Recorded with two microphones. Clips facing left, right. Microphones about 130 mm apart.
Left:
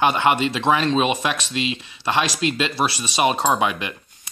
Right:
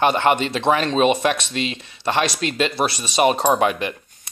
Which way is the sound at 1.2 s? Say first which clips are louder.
Right 2 dB; 45° right (ahead or behind).